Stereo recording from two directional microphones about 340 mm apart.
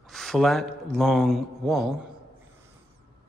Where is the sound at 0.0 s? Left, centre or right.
Centre.